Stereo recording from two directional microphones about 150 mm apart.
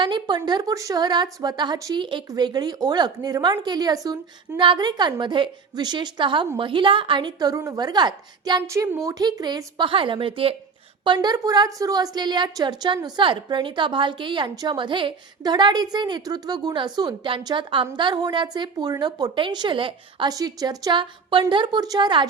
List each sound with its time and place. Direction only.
0.0 s a woman's voice: 30° right (ahead or behind)